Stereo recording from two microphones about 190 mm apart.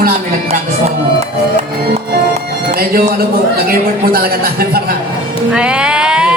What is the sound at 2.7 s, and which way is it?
Speech, 55° right (ahead or behind).